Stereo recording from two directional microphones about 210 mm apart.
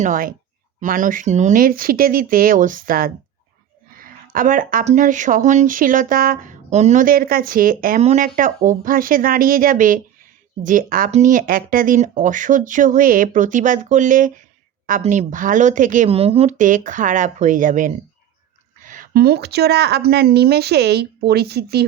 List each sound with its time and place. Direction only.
0.0 s speech: 40° right (ahead or behind)